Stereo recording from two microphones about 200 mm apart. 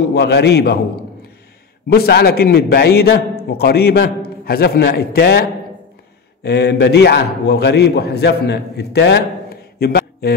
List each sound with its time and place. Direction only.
0.1 s a man's voice: 55° left (ahead or behind)
1.9 s a man's voice: 55° left (ahead or behind)